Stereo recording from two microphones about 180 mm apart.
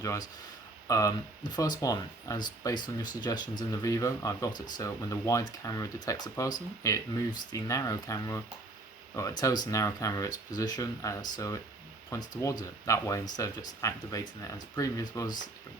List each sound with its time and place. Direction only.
0.0 s speech: 20° left (ahead or behind)